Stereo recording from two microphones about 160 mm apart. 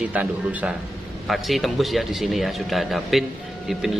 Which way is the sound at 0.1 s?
10° right (ahead or behind).